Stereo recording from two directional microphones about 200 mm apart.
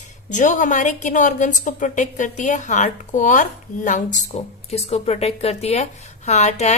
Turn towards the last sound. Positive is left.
turn(degrees=35)  # may be behind; listen again after turning